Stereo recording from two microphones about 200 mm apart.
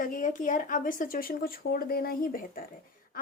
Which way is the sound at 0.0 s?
40° left (ahead or behind).